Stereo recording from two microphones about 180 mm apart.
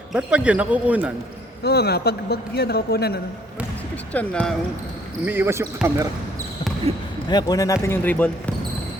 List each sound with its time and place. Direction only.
0.1 s speech: 5° right (ahead or behind)
1.6 s a man's voice: 60° left (ahead or behind)
4.1 s speech: 5° left (ahead or behind)
5.2 s speech: 10° right (ahead or behind)
7.3 s speech: 20° left (ahead or behind)